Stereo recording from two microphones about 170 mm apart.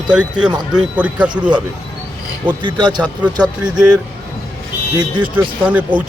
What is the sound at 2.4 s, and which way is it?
Speech, 25° right (ahead or behind).